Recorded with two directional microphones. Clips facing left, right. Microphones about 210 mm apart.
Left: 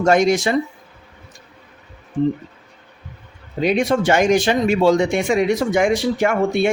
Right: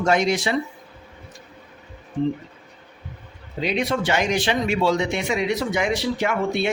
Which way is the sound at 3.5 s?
45° left (ahead or behind).